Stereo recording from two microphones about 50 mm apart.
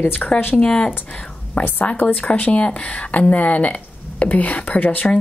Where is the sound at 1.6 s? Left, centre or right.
Left.